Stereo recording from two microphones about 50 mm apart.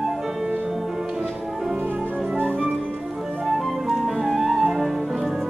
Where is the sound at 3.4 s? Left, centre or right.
Centre.